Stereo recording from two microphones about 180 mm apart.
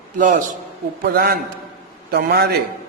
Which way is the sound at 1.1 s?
60° right (ahead or behind).